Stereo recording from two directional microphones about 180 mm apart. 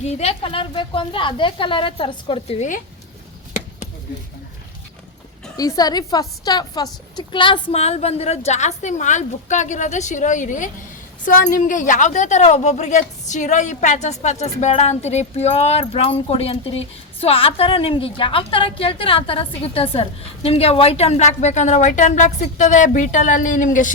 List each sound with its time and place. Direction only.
0.0 s a woman's voice: 35° left (ahead or behind)
5.5 s a woman's voice: 20° left (ahead or behind); by 23.9 s 45° left (ahead or behind)